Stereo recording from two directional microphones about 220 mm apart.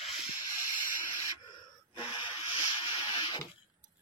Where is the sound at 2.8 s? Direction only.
25° left (ahead or behind).